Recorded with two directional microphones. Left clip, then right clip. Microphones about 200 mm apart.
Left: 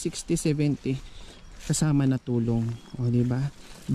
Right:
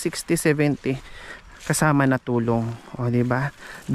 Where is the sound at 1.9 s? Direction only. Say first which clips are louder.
Right 7 dB; 20° left (ahead or behind).